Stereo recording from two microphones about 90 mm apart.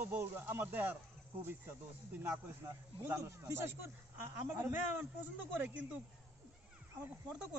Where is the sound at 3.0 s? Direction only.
30° right (ahead or behind).